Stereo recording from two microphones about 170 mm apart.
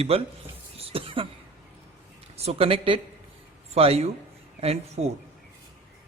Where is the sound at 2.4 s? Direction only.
35° right (ahead or behind).